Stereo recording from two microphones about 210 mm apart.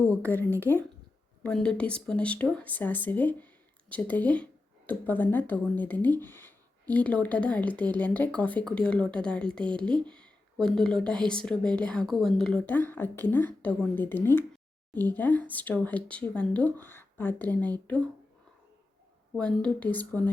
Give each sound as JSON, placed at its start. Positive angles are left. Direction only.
{"t": 0.0, "sound": "speech", "side_deg": 5}
{"t": 19.4, "sound": "speech", "side_deg": 5}